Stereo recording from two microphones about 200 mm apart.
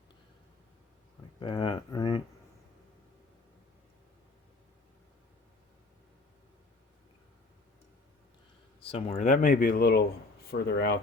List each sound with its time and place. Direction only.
1.4 s speech: 25° left (ahead or behind)
8.9 s speech: 30° left (ahead or behind); by 10.9 s 50° left (ahead or behind)